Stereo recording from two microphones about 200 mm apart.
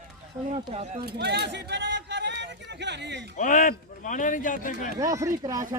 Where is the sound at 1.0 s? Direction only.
55° right (ahead or behind).